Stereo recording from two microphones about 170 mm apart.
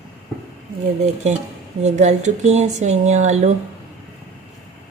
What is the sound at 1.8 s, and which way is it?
Speech, 45° right (ahead or behind).